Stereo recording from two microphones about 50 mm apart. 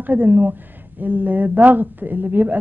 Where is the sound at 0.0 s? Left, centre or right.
Right.